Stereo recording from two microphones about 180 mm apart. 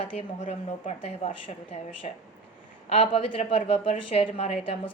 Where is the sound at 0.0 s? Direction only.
40° left (ahead or behind).